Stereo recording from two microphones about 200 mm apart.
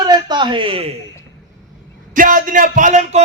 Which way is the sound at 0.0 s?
20° right (ahead or behind).